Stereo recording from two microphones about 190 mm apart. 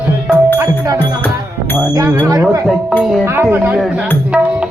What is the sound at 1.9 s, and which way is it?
Speech, 20° right (ahead or behind).